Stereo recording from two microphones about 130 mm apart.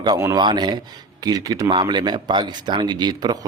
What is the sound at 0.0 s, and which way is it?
A man's voice, 30° right (ahead or behind).